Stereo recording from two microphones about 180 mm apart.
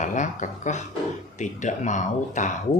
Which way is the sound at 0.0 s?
45° left (ahead or behind).